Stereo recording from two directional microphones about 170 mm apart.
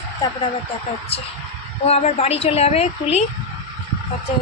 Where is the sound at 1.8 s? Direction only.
40° left (ahead or behind).